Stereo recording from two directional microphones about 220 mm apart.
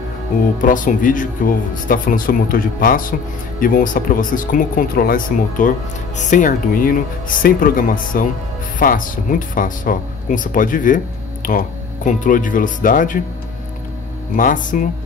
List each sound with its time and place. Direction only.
0.6 s speech: 35° left (ahead or behind)
14.3 s speech: 35° left (ahead or behind)